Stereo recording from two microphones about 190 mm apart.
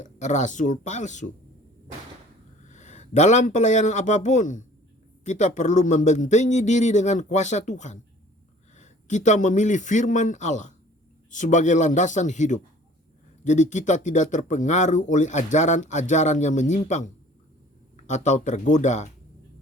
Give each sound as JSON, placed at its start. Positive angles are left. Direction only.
{"t": 0.0, "sound": "speech", "side_deg": 40}
{"t": 2.6, "sound": "a man's voice", "side_deg": 40}